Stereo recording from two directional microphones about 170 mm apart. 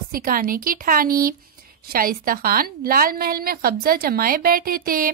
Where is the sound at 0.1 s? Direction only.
55° right (ahead or behind).